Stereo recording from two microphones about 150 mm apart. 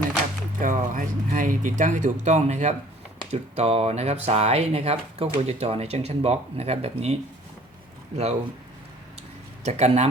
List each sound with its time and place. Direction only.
0.6 s speech: 60° right (ahead or behind); by 7.2 s 45° right (ahead or behind)
9.6 s speech: 45° right (ahead or behind)